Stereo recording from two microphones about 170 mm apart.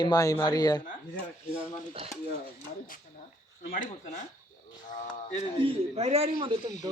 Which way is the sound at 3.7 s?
50° left (ahead or behind).